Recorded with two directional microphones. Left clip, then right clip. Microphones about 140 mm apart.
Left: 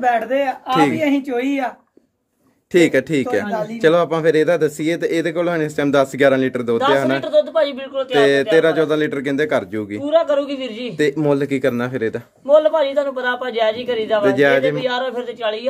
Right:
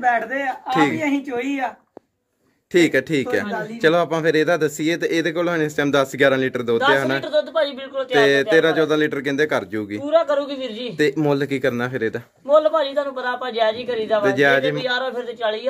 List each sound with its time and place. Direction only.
0.0 s speech: 60° left (ahead or behind)
0.7 s a woman's voice: 10° left (ahead or behind)
2.7 s a man's voice: 5° left (ahead or behind)